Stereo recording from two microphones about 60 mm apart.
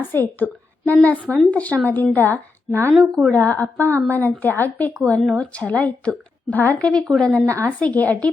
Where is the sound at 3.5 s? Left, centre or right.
Left.